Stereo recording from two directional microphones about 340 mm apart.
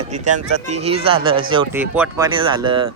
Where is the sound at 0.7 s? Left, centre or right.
Centre.